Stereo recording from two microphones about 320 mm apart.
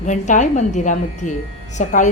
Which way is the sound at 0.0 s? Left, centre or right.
Left.